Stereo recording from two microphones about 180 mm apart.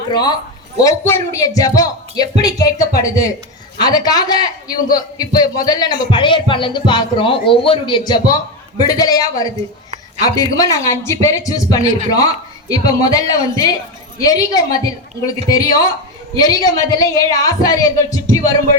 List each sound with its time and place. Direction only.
0.1 s a man's voice: 25° left (ahead or behind)